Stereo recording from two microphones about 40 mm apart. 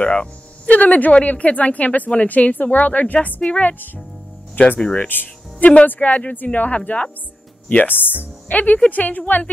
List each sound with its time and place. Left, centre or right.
0.0 s speech: left
0.7 s a woman's voice: left
4.6 s speech: left
5.9 s a woman's voice: left
7.8 s speech: left
8.5 s a woman's voice: left